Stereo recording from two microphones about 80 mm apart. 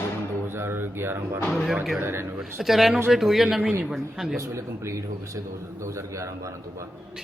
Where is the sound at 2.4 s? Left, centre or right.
Centre.